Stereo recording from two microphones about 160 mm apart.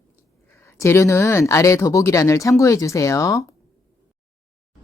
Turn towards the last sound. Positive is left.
turn(degrees=20)  # may be behind; listen again after turning